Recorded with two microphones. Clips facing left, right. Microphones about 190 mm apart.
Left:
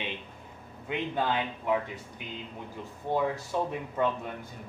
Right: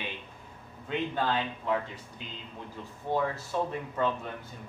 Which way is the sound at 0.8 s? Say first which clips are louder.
Even; 15° left (ahead or behind).